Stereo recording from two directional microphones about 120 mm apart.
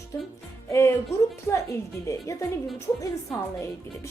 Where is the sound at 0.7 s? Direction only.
25° left (ahead or behind).